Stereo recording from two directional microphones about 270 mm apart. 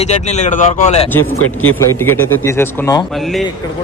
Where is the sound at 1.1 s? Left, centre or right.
Centre.